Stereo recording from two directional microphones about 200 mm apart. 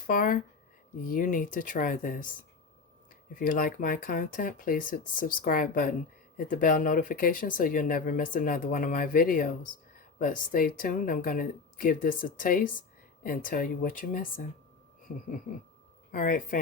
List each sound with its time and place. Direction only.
0.1 s speech: 45° left (ahead or behind)
3.3 s speech: 45° left (ahead or behind)
16.1 s speech: 45° left (ahead or behind)